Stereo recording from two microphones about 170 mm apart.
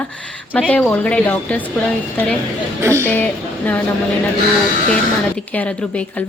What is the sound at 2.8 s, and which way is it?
Speech, 15° right (ahead or behind).